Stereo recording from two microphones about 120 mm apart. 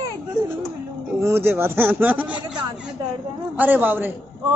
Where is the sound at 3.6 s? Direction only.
15° right (ahead or behind).